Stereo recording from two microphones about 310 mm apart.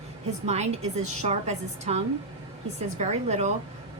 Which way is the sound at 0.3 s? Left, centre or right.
Right.